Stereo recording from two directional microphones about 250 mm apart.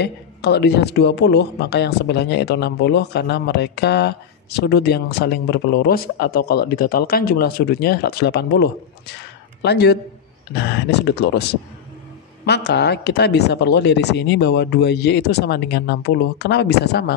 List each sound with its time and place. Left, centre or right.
0.0 s speech: left
12.4 s speech: left